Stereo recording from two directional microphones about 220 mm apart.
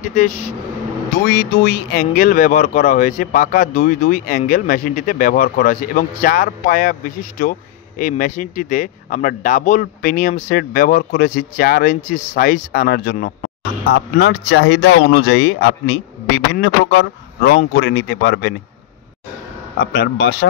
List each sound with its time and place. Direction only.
1.3 s speech: 40° left (ahead or behind)
19.8 s speech: 50° left (ahead or behind)